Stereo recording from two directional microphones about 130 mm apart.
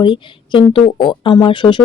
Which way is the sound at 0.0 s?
40° left (ahead or behind).